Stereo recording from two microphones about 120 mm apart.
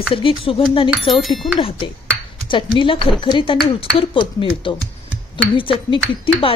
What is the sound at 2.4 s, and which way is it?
Speech, 45° left (ahead or behind).